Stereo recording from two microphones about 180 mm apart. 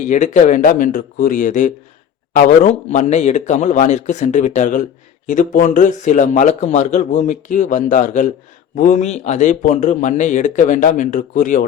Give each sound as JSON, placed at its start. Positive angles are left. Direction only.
{"t": 0.1, "sound": "a man's voice", "side_deg": 45}